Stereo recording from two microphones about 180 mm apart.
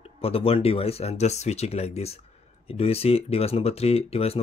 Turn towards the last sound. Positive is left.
turn(degrees=35)  # may be behind; listen again after turning